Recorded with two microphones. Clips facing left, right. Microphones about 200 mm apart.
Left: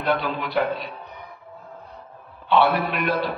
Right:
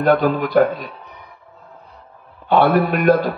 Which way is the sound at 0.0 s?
45° right (ahead or behind).